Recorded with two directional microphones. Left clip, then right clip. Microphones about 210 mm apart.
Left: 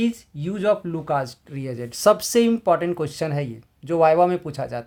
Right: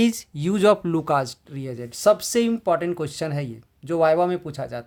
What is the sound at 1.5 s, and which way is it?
Speech, centre (ahead or behind).